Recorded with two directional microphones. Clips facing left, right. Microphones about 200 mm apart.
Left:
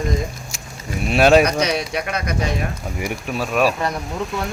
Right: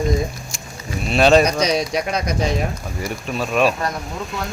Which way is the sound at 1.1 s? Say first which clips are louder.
Even; 10° left (ahead or behind).